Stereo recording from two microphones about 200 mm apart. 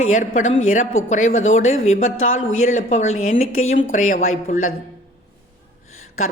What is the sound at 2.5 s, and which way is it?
Speech, 40° left (ahead or behind).